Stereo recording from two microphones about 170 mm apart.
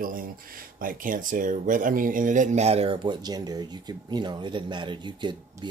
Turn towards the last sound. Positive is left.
turn(degrees=-25)  # may be behind; listen again after turning